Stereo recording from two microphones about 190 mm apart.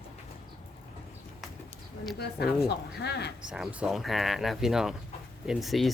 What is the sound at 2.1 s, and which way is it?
A woman's voice, 55° left (ahead or behind).